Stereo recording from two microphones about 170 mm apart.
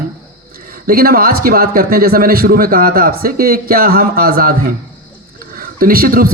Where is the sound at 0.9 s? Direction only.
60° right (ahead or behind).